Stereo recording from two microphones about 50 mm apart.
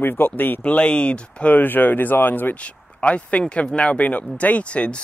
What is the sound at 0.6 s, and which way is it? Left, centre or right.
Speech, left.